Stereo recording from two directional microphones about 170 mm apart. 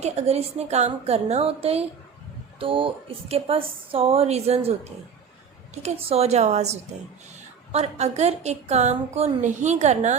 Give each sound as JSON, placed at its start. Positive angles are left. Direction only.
{"t": 0.0, "sound": "a woman's voice", "side_deg": -40}